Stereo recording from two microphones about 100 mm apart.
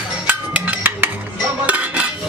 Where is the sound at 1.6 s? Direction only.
15° right (ahead or behind).